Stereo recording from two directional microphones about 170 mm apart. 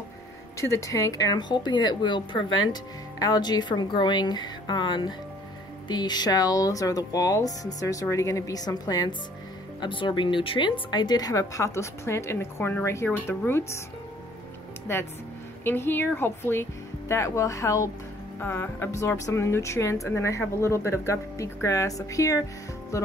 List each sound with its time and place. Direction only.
0.6 s speech: 15° left (ahead or behind)
15.6 s speech: 10° left (ahead or behind)